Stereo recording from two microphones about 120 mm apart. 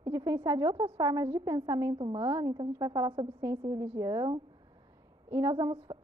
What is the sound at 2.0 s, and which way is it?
A woman's voice, 40° right (ahead or behind).